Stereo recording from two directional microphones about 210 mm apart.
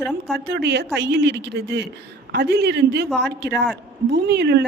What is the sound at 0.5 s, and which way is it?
A woman's voice, 55° right (ahead or behind).